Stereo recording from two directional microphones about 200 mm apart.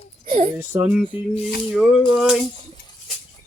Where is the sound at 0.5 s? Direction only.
10° right (ahead or behind).